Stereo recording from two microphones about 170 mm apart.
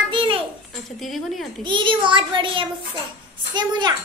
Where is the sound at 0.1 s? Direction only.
30° right (ahead or behind).